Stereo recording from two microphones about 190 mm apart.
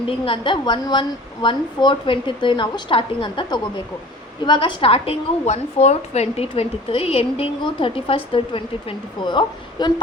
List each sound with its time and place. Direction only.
0.3 s a woman's voice: 25° left (ahead or behind)